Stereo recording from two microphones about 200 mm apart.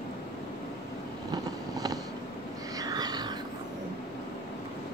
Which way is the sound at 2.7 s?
20° right (ahead or behind).